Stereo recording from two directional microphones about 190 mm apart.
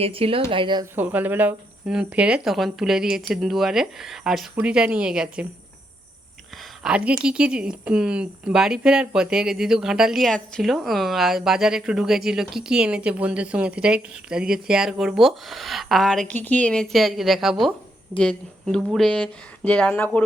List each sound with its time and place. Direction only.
0.0 s speech: 30° right (ahead or behind)
0.9 s speech: 10° right (ahead or behind)
6.8 s speech: 5° right (ahead or behind)